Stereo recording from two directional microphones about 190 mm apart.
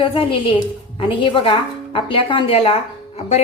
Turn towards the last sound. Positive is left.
turn(degrees=35)  # may be behind; listen again after turning